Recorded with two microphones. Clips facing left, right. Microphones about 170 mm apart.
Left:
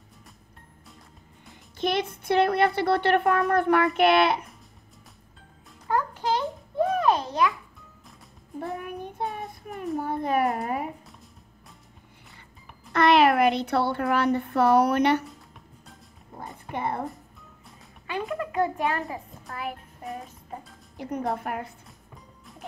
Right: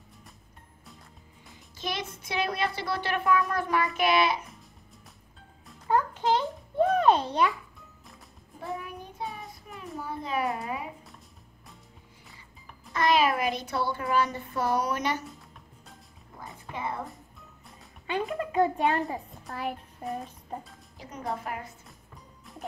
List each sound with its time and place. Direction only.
1.8 s a child's voice: 60° left (ahead or behind)
5.9 s music: 20° right (ahead or behind)
7.0 s a sound: 30° right (ahead or behind)
8.8 s child singing: 55° left (ahead or behind)
9.9 s a child's voice: 55° left (ahead or behind)
12.9 s a child's voice: 65° left (ahead or behind)
16.7 s a child's voice: 60° left (ahead or behind)
18.0 s speech: 25° right (ahead or behind)
21.0 s a child's voice: 60° left (ahead or behind)